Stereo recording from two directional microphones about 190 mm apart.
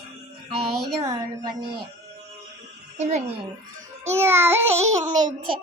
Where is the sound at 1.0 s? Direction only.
20° right (ahead or behind).